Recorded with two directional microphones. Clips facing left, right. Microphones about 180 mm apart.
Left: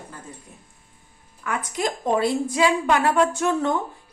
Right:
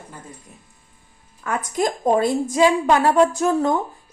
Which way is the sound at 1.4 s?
40° right (ahead or behind).